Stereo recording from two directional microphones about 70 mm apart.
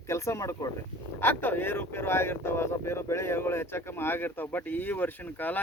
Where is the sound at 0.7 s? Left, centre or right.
Left.